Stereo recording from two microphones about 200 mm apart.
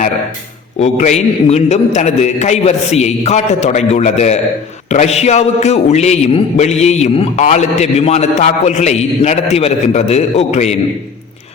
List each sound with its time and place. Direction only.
0.8 s a man's voice: 35° left (ahead or behind)